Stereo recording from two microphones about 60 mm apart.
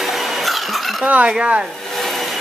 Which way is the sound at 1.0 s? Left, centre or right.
Right.